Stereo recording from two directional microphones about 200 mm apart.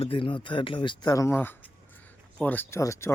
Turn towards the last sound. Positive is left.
turn(degrees=15)  # may be behind; listen again after turning